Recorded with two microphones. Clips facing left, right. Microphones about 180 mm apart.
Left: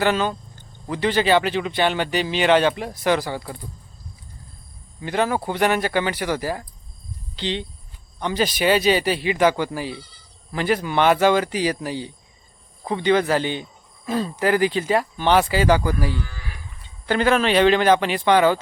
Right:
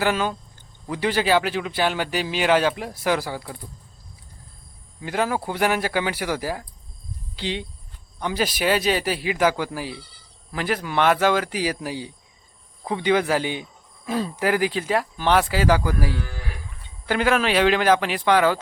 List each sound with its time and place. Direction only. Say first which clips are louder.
0.0 s speech: left 2 dB; 5° right (ahead or behind)
4.9 s speech: left 2 dB; 5° right (ahead or behind)